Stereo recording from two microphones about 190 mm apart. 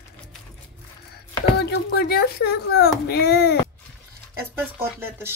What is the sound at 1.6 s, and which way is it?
Speech, 55° left (ahead or behind).